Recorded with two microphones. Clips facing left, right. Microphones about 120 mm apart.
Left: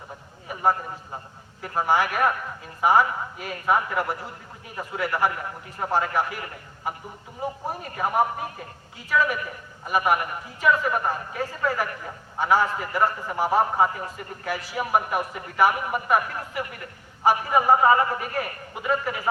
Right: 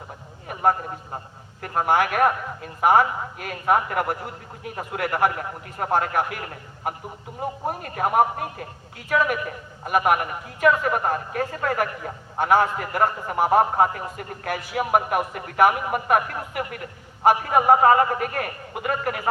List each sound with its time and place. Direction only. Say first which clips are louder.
1.9 s a man's voice: right 2 dB; 55° right (ahead or behind)